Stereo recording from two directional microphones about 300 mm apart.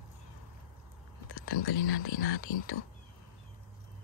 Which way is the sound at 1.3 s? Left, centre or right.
Left.